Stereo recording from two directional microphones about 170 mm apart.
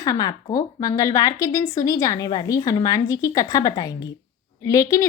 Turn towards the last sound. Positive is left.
turn(degrees=20)  # may be behind; listen again after turning